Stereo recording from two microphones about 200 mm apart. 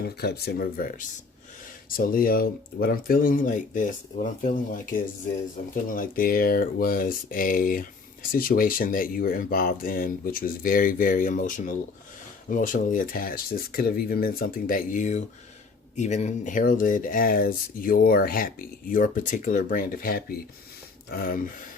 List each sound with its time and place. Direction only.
0.0 s speech: 55° left (ahead or behind)